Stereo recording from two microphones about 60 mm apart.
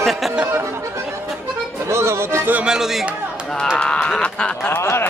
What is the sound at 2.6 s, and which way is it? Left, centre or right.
Speech, centre.